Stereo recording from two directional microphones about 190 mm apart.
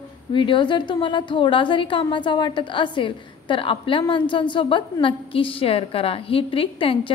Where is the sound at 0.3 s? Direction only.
25° left (ahead or behind).